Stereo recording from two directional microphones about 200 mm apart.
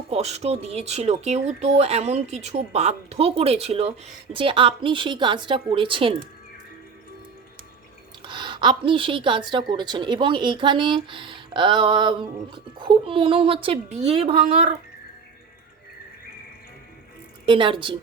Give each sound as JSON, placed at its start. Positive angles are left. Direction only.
{"t": 0.1, "sound": "a woman's voice", "side_deg": -30}
{"t": 8.2, "sound": "a woman's voice", "side_deg": -25}
{"t": 17.4, "sound": "a woman's voice", "side_deg": -25}